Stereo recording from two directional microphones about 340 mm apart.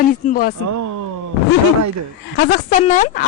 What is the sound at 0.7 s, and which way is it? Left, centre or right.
Speech, right.